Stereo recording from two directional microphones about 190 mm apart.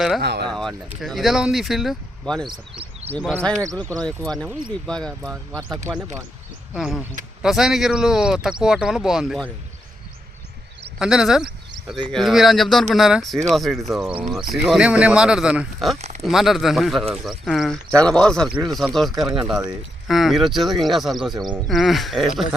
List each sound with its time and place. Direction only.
0.2 s speech: 60° right (ahead or behind)
0.4 s a sound: centre (ahead or behind)
1.0 s speech: centre (ahead or behind)
4.4 s speech: 5° left (ahead or behind)
6.7 s speech: centre (ahead or behind)
11.0 s speech: 5° right (ahead or behind)